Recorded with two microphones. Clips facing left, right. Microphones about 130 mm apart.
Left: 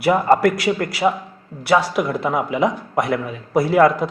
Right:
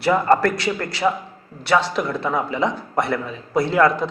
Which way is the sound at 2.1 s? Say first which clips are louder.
Left 2 dB; 15° left (ahead or behind).